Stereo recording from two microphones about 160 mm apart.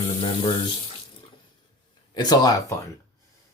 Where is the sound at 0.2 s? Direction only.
35° left (ahead or behind).